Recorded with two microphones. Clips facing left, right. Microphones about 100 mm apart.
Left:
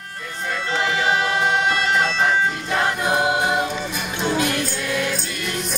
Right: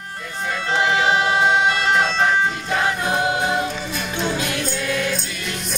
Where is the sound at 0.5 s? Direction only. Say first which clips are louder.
Right 3 dB; 5° right (ahead or behind).